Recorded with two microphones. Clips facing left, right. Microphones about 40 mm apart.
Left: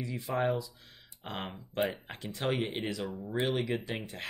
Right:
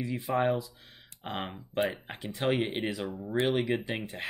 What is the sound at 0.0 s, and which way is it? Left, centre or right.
Speech, right.